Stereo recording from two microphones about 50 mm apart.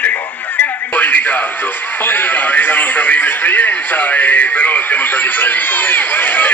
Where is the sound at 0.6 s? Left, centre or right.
Left.